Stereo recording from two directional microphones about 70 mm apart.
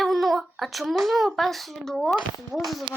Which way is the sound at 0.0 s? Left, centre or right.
Centre.